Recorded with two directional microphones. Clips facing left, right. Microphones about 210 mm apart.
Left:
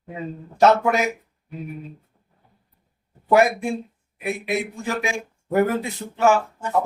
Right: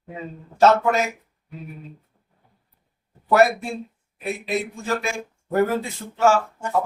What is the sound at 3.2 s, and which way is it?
Speech, 15° left (ahead or behind).